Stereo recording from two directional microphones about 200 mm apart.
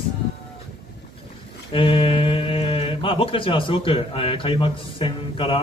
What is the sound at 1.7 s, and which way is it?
Speech, 25° left (ahead or behind).